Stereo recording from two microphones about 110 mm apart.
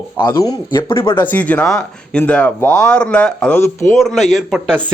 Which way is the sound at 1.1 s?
15° left (ahead or behind).